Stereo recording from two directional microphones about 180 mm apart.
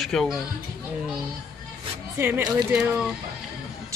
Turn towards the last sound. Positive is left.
turn(degrees=-5)  # may be behind; listen again after turning